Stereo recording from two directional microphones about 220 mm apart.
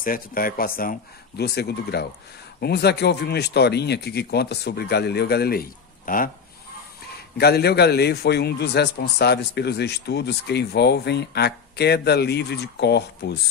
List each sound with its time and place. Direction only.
0.0 s a man's voice: 40° left (ahead or behind)
7.3 s a man's voice: 45° left (ahead or behind)